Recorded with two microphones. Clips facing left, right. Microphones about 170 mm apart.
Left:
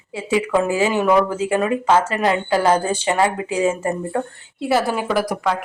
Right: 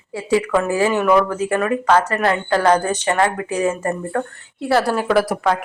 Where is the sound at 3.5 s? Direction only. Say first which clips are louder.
Even; 25° left (ahead or behind).